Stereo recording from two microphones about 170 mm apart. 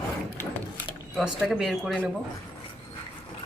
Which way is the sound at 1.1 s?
Centre (ahead or behind).